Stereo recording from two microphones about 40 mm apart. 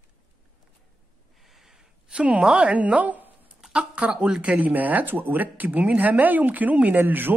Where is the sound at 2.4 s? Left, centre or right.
Right.